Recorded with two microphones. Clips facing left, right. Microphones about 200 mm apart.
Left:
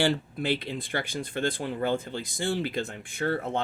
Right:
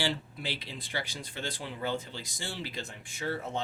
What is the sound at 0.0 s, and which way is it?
Speech, 50° left (ahead or behind).